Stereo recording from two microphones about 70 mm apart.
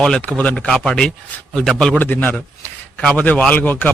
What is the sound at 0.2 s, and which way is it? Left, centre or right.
A man's voice, centre.